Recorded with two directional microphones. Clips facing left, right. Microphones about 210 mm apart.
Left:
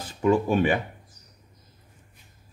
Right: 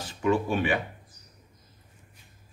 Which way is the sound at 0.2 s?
45° left (ahead or behind).